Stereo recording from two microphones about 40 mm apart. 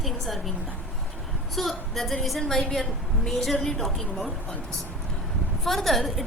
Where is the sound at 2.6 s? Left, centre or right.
Centre.